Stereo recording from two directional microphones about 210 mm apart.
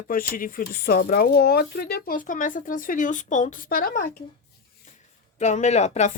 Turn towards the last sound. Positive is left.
turn(degrees=30)  # may be behind; listen again after turning